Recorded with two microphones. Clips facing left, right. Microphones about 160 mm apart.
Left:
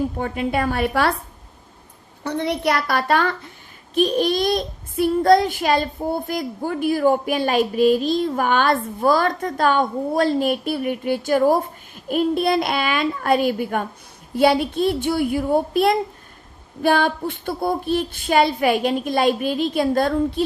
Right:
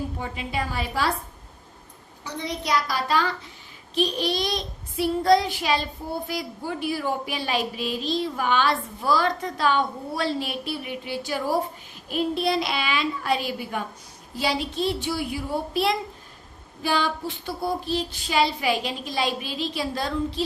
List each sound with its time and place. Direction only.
0.2 s a woman's voice: 55° left (ahead or behind)
2.2 s a woman's voice: 60° left (ahead or behind)